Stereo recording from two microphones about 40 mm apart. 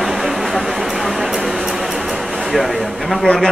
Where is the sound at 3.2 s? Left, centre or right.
Centre.